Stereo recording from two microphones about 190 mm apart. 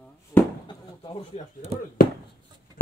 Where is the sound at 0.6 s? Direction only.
25° left (ahead or behind).